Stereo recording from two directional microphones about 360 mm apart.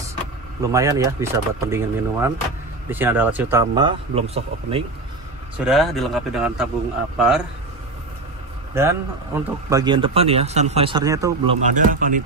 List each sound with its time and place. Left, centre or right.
0.7 s speech: centre
5.7 s speech: centre
8.7 s speech: centre
11.6 s speech: right